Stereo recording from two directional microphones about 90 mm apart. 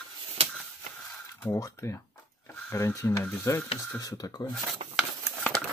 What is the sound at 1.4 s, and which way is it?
Speech, 30° left (ahead or behind).